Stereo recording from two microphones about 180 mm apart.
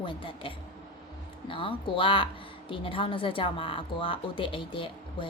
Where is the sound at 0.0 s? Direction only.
30° left (ahead or behind).